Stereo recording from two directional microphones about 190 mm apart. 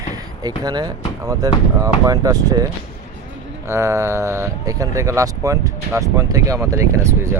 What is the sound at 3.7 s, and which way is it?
Speech, 15° right (ahead or behind).